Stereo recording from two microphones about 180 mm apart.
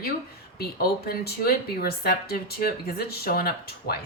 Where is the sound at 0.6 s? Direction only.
60° left (ahead or behind).